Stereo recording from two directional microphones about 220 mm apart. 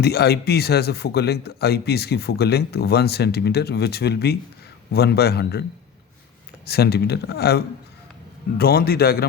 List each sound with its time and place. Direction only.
0.0 s speech: 45° left (ahead or behind)
6.7 s speech: 45° left (ahead or behind)